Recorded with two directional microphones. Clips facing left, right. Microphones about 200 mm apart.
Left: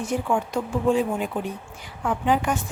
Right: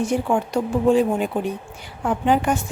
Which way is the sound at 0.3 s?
35° right (ahead or behind).